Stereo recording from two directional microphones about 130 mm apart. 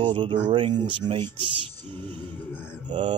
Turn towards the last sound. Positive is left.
turn(degrees=-40)  # may be behind; listen again after turning